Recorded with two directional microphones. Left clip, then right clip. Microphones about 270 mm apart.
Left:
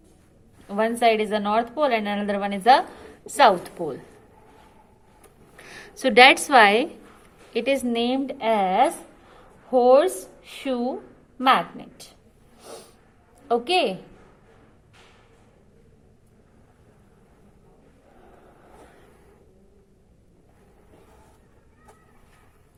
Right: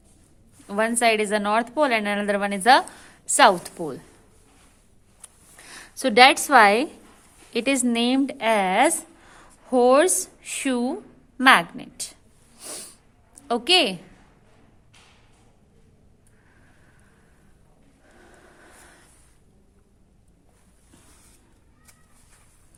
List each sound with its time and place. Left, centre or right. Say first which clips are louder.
0.7 s a woman's voice: even; right
5.5 s a woman's voice: right 1 dB; right
12.5 s snort: right 2 dB; right
13.5 s a woman's voice: right 2 dB; right